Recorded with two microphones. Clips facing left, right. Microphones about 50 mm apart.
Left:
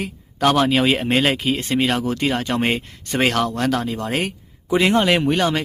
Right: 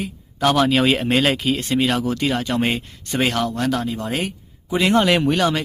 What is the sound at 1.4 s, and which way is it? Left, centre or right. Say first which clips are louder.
Speech: even; left.